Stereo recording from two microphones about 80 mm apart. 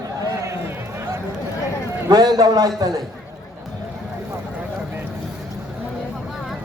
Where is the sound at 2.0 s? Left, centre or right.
Right.